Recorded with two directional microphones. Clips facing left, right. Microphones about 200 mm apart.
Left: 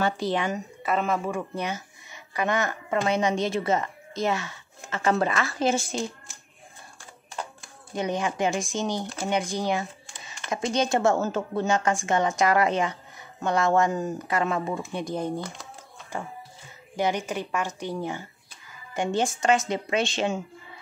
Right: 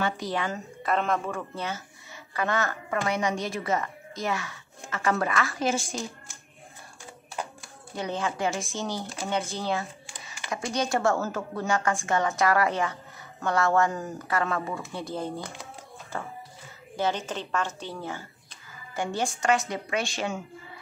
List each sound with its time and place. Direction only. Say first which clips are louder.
0.3 s a woman's voice: left 3 dB; 20° left (ahead or behind)
0.8 s a woman's voice: left 1 dB; 5° left (ahead or behind); by 6.0 s 25° left (ahead or behind)
7.9 s a woman's voice: left 3 dB; 15° left (ahead or behind)